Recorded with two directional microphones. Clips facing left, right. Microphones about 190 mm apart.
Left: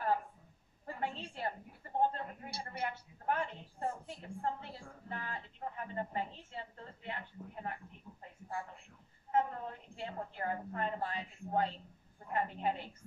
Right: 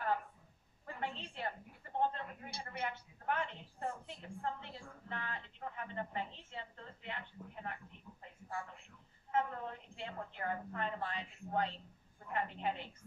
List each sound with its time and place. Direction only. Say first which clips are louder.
0.8 s a sound: left 3 dB; 40° left (ahead or behind)
2.0 s a woman's voice: left 3 dB; 40° left (ahead or behind)
9.3 s a woman's voice: left 3 dB; 35° left (ahead or behind)